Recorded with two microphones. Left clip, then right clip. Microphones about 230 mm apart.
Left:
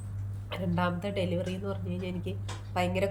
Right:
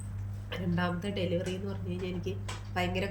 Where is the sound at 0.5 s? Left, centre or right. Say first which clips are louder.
Left 3 dB; centre.